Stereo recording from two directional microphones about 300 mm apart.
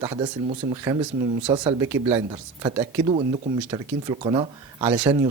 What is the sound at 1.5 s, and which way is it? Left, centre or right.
Speech, centre.